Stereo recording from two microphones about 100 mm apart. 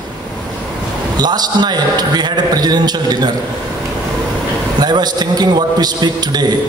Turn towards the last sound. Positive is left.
turn(degrees=-45)  # may be behind; listen again after turning